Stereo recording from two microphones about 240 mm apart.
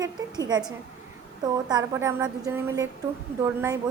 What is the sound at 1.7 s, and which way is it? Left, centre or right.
A woman's voice, centre.